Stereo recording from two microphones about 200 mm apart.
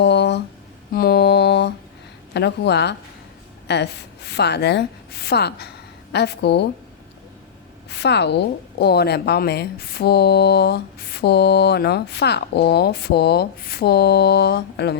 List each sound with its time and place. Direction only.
0.0 s a sound: 60° left (ahead or behind)
0.9 s mantra: 50° left (ahead or behind)
2.3 s a woman's voice: 60° left (ahead or behind)
7.9 s a woman's voice: 60° left (ahead or behind)